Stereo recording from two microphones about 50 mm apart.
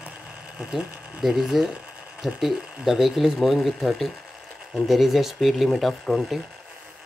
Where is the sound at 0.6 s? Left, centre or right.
Centre.